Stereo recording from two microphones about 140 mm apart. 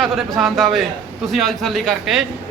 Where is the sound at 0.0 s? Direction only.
Centre (ahead or behind).